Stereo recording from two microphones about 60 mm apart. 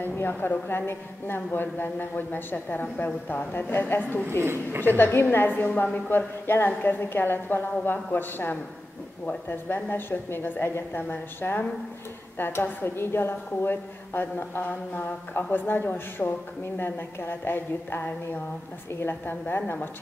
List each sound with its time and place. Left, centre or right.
0.0 s a woman's voice: left
4.4 s a woman's voice: right
4.8 s a woman's voice: left